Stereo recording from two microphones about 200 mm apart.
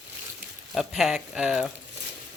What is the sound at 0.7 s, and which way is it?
Speech, centre (ahead or behind).